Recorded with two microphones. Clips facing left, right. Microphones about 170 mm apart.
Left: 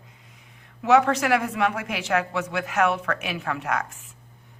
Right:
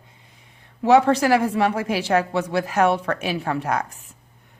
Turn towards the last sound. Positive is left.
turn(degrees=-35)  # may be behind; listen again after turning